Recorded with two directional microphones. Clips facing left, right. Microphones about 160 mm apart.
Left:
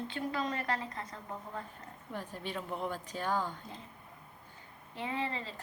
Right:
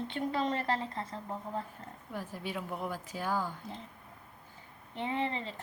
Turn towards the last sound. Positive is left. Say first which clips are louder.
# right 3 dB
turn(degrees=-25)  # may be behind; listen again after turning